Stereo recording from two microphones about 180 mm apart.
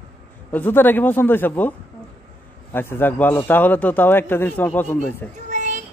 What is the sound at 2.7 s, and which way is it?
A man's voice, 10° left (ahead or behind).